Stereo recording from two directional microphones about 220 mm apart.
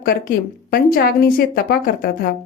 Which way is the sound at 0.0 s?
40° left (ahead or behind).